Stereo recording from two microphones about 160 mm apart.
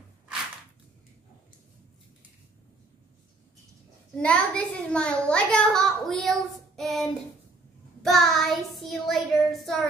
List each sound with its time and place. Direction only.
4.2 s a child's voice: 5° left (ahead or behind)